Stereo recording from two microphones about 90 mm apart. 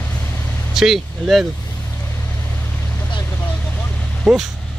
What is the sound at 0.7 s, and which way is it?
Speech, 5° right (ahead or behind).